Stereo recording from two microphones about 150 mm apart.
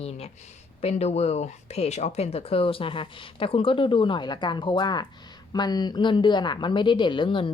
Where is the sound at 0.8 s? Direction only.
45° left (ahead or behind).